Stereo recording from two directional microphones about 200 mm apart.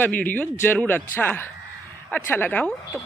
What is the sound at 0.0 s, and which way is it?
Speech, 10° left (ahead or behind).